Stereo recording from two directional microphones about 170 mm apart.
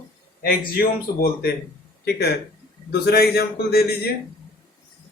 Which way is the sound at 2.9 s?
65° left (ahead or behind).